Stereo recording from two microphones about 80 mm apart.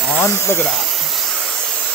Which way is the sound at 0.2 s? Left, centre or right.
Left.